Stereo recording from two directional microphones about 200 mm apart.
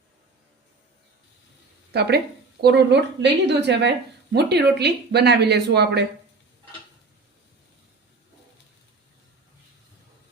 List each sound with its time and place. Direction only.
1.9 s a woman's voice: 55° right (ahead or behind)